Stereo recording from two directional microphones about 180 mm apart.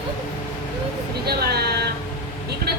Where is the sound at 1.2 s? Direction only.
60° right (ahead or behind).